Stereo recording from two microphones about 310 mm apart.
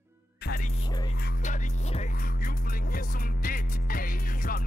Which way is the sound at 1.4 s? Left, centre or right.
Left.